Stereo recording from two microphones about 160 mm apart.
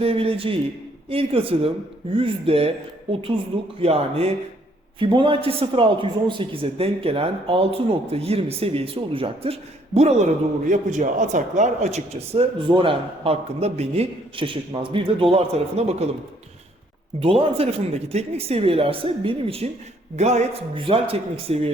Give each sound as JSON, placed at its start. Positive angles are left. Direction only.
{"t": 0.0, "sound": "a man's voice", "side_deg": -35}
{"t": 17.2, "sound": "a man's voice", "side_deg": -35}